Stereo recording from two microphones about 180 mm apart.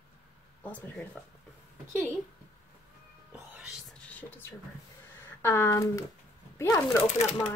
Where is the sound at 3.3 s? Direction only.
5° right (ahead or behind).